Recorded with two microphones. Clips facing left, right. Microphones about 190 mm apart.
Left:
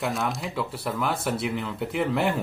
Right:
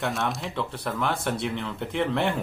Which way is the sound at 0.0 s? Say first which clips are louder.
Even; centre (ahead or behind).